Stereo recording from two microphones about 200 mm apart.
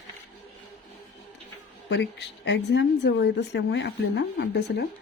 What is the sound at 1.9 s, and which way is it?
Speech, 60° left (ahead or behind).